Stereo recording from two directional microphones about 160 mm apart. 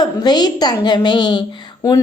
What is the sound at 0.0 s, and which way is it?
A woman's voice, 25° left (ahead or behind).